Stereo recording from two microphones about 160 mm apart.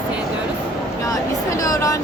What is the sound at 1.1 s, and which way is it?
Speech, 20° left (ahead or behind).